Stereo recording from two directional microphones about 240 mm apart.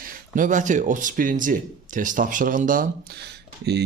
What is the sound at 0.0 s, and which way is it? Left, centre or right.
Speech, right.